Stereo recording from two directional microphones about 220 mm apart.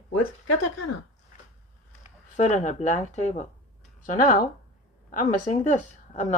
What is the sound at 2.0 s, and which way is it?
Speech, 35° left (ahead or behind).